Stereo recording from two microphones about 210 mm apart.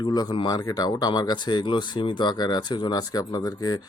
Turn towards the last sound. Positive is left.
turn(degrees=20)  # may be behind; listen again after turning